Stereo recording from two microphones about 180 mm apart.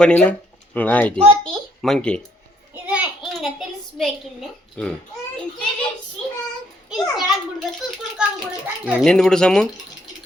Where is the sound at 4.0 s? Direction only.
Centre (ahead or behind).